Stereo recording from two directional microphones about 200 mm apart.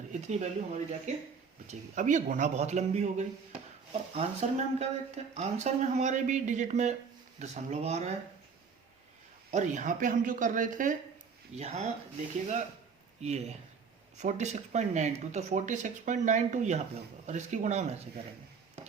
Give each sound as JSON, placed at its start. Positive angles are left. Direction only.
{"t": 0.1, "sound": "speech", "side_deg": -35}
{"t": 9.5, "sound": "speech", "side_deg": -40}
{"t": 13.2, "sound": "speech", "side_deg": -35}